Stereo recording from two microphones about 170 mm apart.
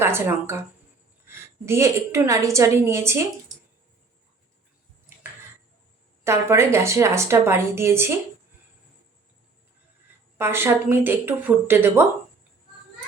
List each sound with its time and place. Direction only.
0.0 s a woman's voice: 15° right (ahead or behind)
1.6 s a woman's voice: 15° right (ahead or behind)
6.2 s a woman's voice: 15° right (ahead or behind)
10.3 s a woman's voice: 15° right (ahead or behind)